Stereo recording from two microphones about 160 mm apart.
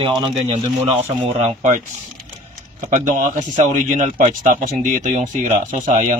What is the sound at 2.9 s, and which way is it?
A man's voice, 55° right (ahead or behind).